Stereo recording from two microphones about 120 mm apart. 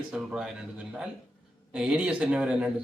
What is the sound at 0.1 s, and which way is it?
Speech, 5° right (ahead or behind).